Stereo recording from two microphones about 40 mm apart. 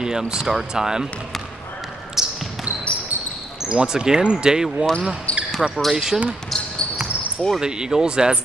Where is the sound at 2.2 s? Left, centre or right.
Centre.